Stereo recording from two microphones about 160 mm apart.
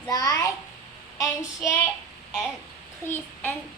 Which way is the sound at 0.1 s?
20° left (ahead or behind).